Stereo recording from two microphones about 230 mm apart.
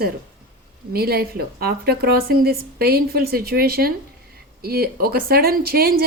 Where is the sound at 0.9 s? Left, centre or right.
Right.